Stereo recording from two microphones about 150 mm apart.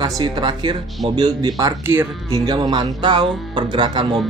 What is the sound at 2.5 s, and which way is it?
Music, 30° right (ahead or behind).